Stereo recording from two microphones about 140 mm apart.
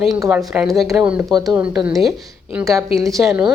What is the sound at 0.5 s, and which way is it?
Speech, 10° right (ahead or behind).